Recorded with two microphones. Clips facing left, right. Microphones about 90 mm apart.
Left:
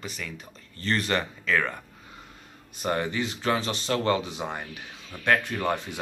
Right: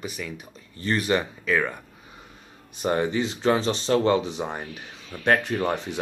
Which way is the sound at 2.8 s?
20° right (ahead or behind).